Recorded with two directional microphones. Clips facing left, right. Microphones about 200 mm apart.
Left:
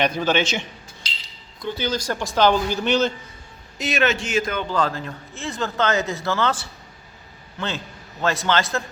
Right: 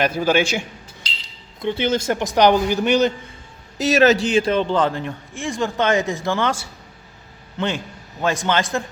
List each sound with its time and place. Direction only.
0.0 s a man's voice: 10° right (ahead or behind)
1.5 s speech: 25° right (ahead or behind)
3.8 s a man's voice: 40° right (ahead or behind); by 8.8 s 15° right (ahead or behind)